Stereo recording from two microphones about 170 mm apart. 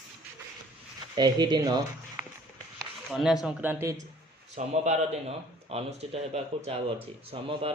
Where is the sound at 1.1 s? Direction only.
25° right (ahead or behind).